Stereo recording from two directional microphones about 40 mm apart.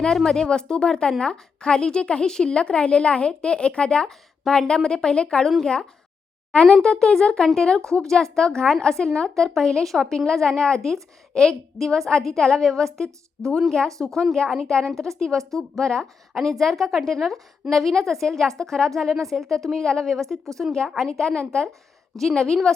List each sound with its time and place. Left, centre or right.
0.3 s a woman's voice: centre
6.5 s a child's voice: left; by 11.0 s centre
11.3 s a woman's voice: centre
15.8 s a woman's voice: centre
16.4 s a woman's voice: centre
20.3 s a woman's voice: centre
21.0 s a woman's voice: centre
22.1 s a woman's voice: centre